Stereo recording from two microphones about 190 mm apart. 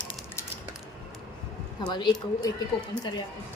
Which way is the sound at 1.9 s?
25° left (ahead or behind).